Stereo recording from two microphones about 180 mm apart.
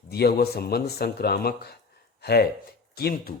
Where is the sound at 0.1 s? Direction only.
60° left (ahead or behind).